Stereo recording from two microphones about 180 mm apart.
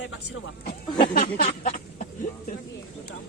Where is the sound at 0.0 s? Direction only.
85° left.